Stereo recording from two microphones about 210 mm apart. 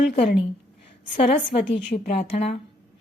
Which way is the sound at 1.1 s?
25° left (ahead or behind).